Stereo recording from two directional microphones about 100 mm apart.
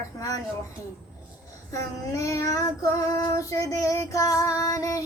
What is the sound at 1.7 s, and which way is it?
Female singing, 30° left (ahead or behind).